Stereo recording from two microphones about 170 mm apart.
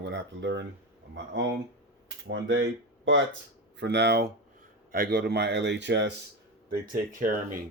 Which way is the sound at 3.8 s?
85° right.